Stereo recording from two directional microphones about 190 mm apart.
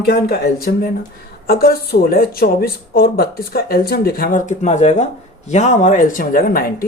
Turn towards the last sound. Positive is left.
turn(degrees=50)  # may be behind; listen again after turning